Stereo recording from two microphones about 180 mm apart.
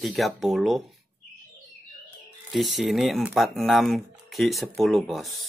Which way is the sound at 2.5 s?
Centre (ahead or behind).